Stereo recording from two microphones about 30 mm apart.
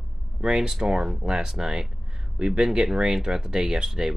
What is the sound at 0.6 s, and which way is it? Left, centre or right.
Speech, centre.